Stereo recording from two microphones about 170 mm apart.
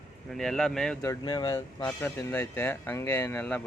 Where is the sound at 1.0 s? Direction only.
20° left (ahead or behind).